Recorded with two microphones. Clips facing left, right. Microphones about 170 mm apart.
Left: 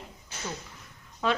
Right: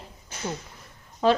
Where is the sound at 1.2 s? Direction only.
35° right (ahead or behind).